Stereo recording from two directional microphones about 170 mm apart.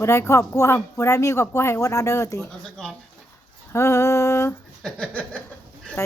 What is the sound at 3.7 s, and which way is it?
Speech, 15° left (ahead or behind).